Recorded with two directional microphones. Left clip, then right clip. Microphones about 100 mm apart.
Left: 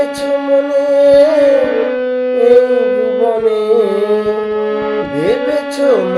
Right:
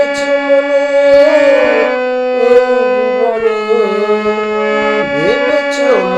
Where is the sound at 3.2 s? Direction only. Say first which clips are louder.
Even; 20° left (ahead or behind).